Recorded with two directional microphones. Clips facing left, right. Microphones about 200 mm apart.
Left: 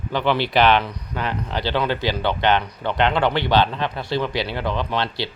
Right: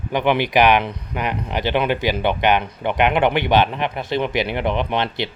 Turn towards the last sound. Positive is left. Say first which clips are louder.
# right 2 dB
turn(degrees=-20)  # may be behind; listen again after turning